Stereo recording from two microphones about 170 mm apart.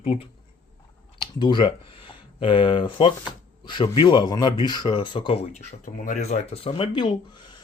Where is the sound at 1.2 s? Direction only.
30° left (ahead or behind).